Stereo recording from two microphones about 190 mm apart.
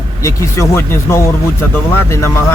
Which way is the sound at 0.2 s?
15° left (ahead or behind).